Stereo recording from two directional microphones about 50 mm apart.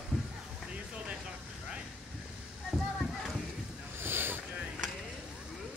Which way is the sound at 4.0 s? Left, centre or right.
Right.